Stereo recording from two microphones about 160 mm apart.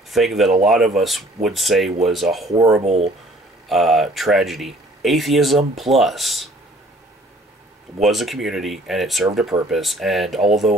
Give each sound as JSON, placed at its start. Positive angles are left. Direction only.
{"t": 0.1, "sound": "speech", "side_deg": 0}
{"t": 2.8, "sound": "speech", "side_deg": -40}
{"t": 3.6, "sound": "speech", "side_deg": 0}
{"t": 8.0, "sound": "speech", "side_deg": 0}